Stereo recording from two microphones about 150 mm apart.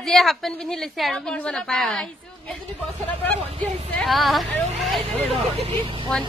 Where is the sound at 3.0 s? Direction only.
10° left (ahead or behind).